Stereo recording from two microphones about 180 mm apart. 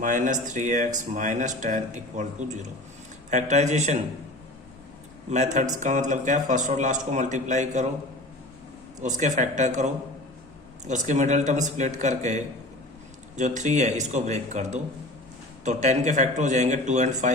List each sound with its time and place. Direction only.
0.0 s a man's voice: 45° right (ahead or behind)
5.3 s a man's voice: 40° right (ahead or behind)
9.0 s a man's voice: 40° right (ahead or behind)